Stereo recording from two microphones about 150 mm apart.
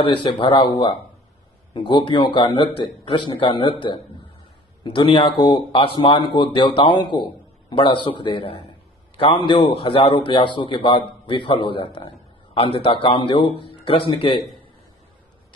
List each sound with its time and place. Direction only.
0.0 s a man's voice: 35° left (ahead or behind)